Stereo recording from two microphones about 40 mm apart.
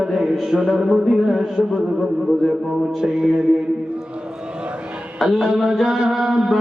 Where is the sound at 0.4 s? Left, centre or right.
Centre.